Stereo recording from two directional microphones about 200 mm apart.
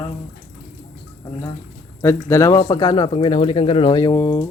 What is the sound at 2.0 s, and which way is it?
Speech, 15° left (ahead or behind).